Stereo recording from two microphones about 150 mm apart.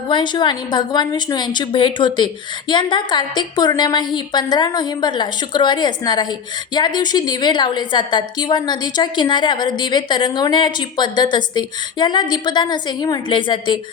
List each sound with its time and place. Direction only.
0.1 s a woman's voice: 30° left (ahead or behind)